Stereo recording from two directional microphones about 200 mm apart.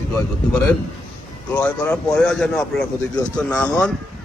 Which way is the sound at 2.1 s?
5° left (ahead or behind).